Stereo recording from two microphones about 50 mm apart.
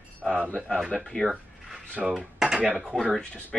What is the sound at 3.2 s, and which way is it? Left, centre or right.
Speech, left.